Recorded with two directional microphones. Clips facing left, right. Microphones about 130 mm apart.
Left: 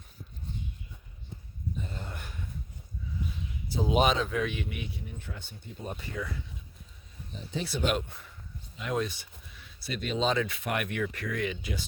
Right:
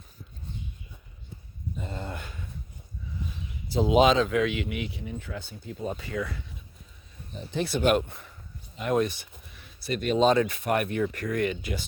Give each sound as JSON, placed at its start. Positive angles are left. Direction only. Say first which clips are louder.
{"t": 3.7, "sound": "speech", "louder": "right 5 dB", "side_deg": -90}
{"t": 7.5, "sound": "speech", "louder": "right 6 dB", "side_deg": -60}
{"t": 11.1, "sound": "speech", "louder": "right 5 dB", "side_deg": -50}